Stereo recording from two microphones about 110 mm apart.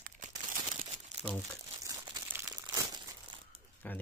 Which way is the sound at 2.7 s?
35° right (ahead or behind).